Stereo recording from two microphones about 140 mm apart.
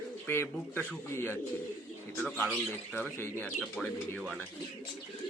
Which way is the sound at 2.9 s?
15° left (ahead or behind).